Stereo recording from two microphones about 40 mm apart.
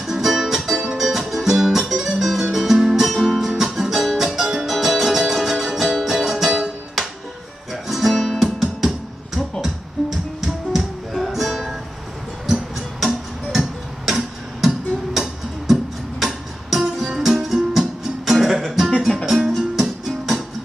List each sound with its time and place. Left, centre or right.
0.0 s music: centre
12.4 s music: centre